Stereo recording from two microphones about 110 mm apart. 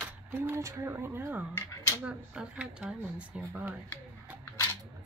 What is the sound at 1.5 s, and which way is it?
Speech, 20° left (ahead or behind).